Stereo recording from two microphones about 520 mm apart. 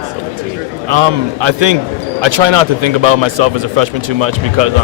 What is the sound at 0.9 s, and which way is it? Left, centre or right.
A man's voice, right.